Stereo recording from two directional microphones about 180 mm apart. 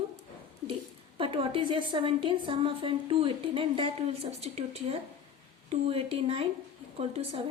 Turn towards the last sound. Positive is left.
turn(degrees=-35)  # may be behind; listen again after turning